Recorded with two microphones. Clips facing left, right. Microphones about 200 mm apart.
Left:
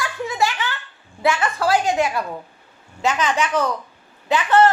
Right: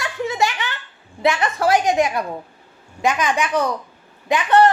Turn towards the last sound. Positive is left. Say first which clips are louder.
# right 1 dB
turn(degrees=-15)  # may be behind; listen again after turning